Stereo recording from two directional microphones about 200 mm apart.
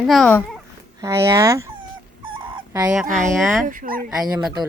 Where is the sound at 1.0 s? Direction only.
15° right (ahead or behind).